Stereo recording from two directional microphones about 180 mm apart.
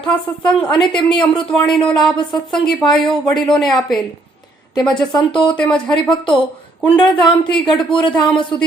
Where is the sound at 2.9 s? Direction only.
Centre (ahead or behind).